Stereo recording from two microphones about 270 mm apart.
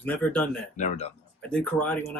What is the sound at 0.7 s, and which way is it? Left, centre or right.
Speech, left.